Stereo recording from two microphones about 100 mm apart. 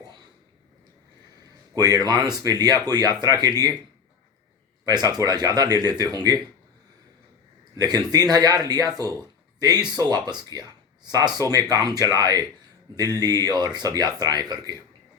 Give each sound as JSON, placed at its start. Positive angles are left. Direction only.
{"t": 1.7, "sound": "speech", "side_deg": -40}
{"t": 4.9, "sound": "speech", "side_deg": -40}
{"t": 7.8, "sound": "speech", "side_deg": -40}